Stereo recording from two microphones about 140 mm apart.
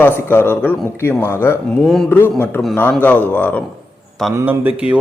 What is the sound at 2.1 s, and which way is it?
Speech, 15° left (ahead or behind).